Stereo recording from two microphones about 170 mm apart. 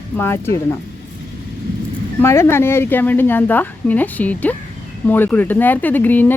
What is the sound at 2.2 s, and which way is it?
Speech, 15° left (ahead or behind).